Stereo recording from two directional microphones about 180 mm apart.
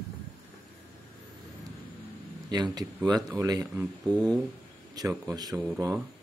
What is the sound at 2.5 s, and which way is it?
Speech, 20° right (ahead or behind).